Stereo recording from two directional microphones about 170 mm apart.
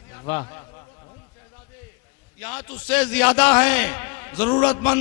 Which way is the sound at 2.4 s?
10° left (ahead or behind).